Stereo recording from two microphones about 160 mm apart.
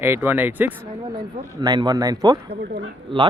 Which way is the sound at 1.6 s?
25° right (ahead or behind).